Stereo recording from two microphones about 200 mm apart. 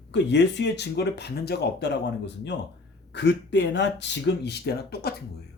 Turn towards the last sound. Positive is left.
turn(degrees=55)  # may be behind; listen again after turning